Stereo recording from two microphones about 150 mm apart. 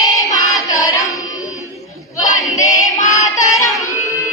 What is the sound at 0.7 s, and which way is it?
Music, 20° left (ahead or behind).